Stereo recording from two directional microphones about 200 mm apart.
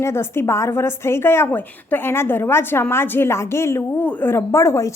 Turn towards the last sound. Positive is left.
turn(degrees=15)  # may be behind; listen again after turning